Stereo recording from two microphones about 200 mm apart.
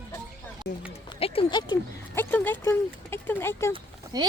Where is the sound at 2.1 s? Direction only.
10° left (ahead or behind).